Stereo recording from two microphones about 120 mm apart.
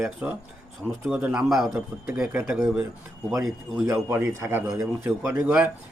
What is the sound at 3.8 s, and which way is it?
A man's voice, 20° right (ahead or behind).